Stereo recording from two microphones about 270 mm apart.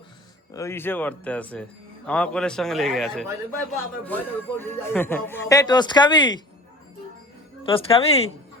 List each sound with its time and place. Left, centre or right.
0.5 s a man's voice: centre
7.6 s speech: centre